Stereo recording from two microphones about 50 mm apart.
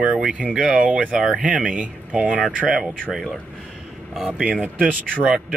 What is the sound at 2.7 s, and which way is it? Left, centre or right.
Speech, centre.